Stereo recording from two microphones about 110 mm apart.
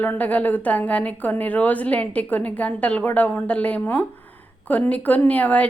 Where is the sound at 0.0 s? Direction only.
15° left (ahead or behind).